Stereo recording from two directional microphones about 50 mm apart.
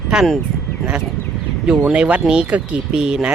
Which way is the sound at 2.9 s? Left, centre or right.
Centre.